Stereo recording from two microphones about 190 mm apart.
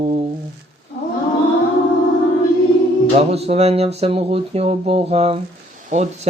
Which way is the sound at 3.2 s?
30° right (ahead or behind).